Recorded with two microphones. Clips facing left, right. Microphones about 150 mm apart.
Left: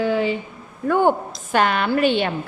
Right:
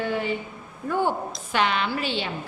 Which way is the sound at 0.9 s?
60° left (ahead or behind).